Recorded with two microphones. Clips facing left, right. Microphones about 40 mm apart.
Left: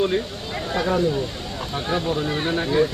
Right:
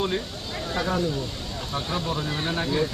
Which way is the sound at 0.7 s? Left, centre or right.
Centre.